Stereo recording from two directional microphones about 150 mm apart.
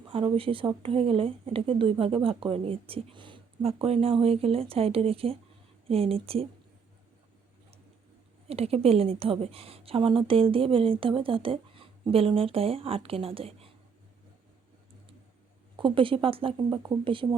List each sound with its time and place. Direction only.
0.1 s a woman's voice: 40° right (ahead or behind)
8.4 s a woman's voice: 40° right (ahead or behind)
15.7 s a woman's voice: 35° right (ahead or behind)